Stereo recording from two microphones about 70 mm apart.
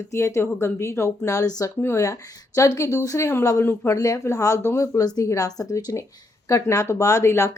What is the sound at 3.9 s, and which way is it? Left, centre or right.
A woman's voice, left.